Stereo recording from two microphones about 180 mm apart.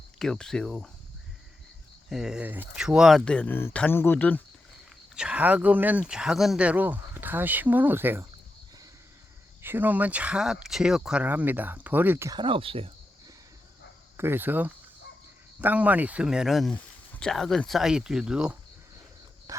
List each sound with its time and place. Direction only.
0.2 s speech: 5° left (ahead or behind)
2.0 s speech: 5° right (ahead or behind)
5.1 s speech: 5° right (ahead or behind)
9.6 s speech: 10° right (ahead or behind)
12.4 s speech: 30° right (ahead or behind)
14.2 s speech: 10° right (ahead or behind)
19.5 s a sound: 20° right (ahead or behind)